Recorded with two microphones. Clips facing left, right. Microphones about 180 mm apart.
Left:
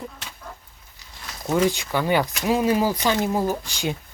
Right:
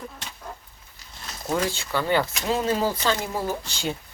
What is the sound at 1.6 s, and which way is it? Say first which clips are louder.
Speech: left 3 dB; 15° left (ahead or behind).